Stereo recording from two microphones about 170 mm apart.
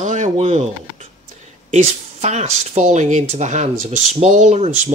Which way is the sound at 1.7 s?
45° right (ahead or behind).